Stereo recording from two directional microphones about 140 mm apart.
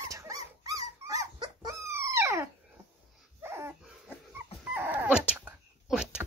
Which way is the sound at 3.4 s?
20° right (ahead or behind).